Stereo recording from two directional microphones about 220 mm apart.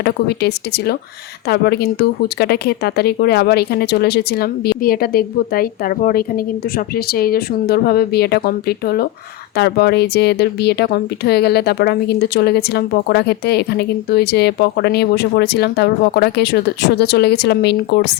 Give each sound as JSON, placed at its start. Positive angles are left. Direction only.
{"t": 0.0, "sound": "speech", "side_deg": 50}